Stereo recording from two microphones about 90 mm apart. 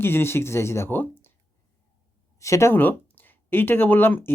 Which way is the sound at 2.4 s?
35° left (ahead or behind).